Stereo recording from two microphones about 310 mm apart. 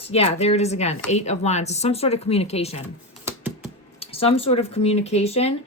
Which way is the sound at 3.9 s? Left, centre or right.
Centre.